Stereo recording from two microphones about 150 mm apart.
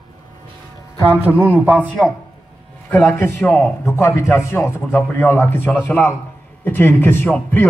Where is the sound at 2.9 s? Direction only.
10° left (ahead or behind).